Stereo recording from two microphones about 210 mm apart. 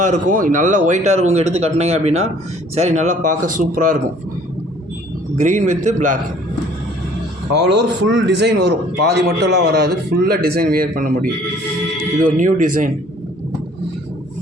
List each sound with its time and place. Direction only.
0.0 s speech: 35° right (ahead or behind)
5.4 s speech: 35° right (ahead or behind)
7.5 s speech: 55° right (ahead or behind)
12.3 s speech: 35° right (ahead or behind)